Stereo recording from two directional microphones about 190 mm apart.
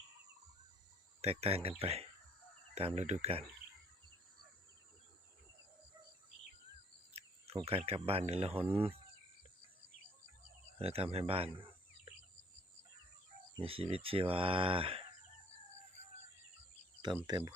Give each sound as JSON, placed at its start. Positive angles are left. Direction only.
{"t": 1.2, "sound": "speech", "side_deg": -30}
{"t": 7.1, "sound": "speech", "side_deg": -30}
{"t": 10.8, "sound": "speech", "side_deg": -30}
{"t": 13.6, "sound": "speech", "side_deg": -30}
{"t": 17.2, "sound": "speech", "side_deg": -20}